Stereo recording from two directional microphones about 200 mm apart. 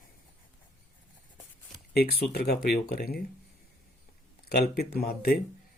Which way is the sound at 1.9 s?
50° left (ahead or behind).